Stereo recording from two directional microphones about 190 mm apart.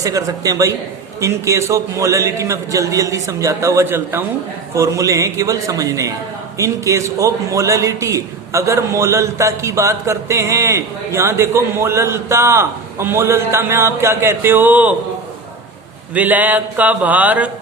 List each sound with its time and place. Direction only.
0.0 s a man's voice: 20° right (ahead or behind)
16.1 s a man's voice: 10° right (ahead or behind)